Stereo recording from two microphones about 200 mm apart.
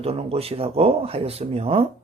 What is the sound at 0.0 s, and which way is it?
Speech, 30° right (ahead or behind).